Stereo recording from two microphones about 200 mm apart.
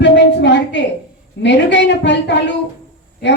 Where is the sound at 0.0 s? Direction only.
60° left (ahead or behind).